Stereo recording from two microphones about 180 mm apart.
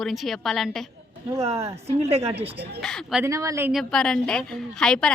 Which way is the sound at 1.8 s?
35° right (ahead or behind).